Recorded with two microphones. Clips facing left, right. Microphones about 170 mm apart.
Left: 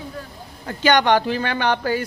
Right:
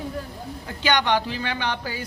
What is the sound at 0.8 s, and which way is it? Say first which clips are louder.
Speech: left 5 dB; 50° left (ahead or behind).